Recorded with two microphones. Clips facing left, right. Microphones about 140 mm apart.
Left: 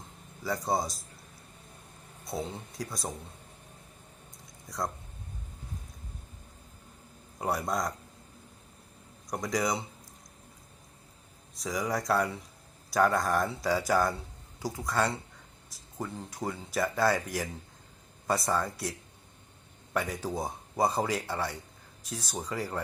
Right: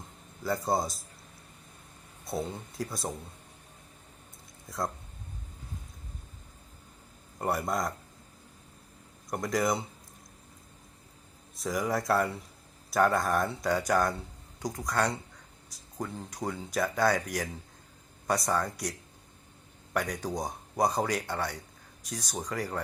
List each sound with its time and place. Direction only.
0.4 s speech: centre (ahead or behind)
2.2 s speech: centre (ahead or behind)
4.7 s speech: centre (ahead or behind)
7.3 s speech: centre (ahead or behind)
9.3 s speech: centre (ahead or behind)
11.6 s speech: centre (ahead or behind)